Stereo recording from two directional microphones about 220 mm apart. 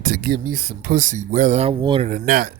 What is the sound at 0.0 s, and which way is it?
Speech, 40° right (ahead or behind).